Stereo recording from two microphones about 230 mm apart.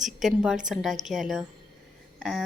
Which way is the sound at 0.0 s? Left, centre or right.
Centre.